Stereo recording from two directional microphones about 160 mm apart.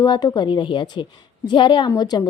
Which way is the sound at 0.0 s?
25° left (ahead or behind).